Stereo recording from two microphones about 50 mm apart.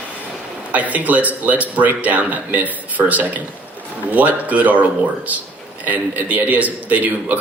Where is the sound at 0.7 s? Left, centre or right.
Right.